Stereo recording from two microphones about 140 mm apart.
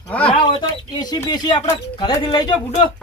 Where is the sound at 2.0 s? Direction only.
35° left (ahead or behind).